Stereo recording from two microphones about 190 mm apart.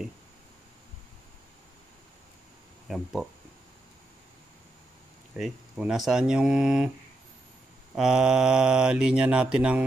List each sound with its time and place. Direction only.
2.9 s mantra: centre (ahead or behind)
5.4 s mantra: centre (ahead or behind)
7.9 s mantra: 5° right (ahead or behind)